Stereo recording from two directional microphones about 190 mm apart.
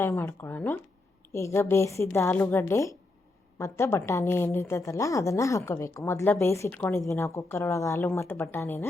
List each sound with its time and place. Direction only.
0.0 s speech: 15° left (ahead or behind)